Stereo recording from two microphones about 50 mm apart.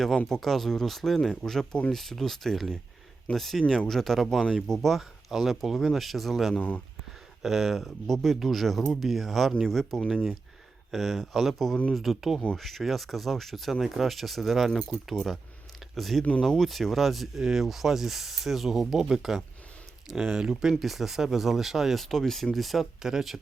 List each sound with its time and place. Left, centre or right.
0.3 s speech: centre
4.9 s speech: centre
6.6 s speech: left
7.4 s speech: centre
22.1 s speech: centre